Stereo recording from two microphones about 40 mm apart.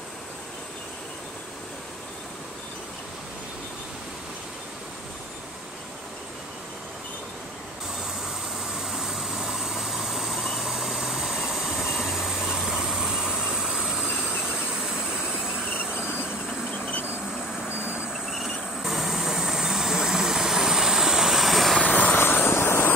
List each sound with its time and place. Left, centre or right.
8.7 s vehicle: centre
18.1 s vehicle: centre
21.8 s vehicle: left
22.1 s vehicle: left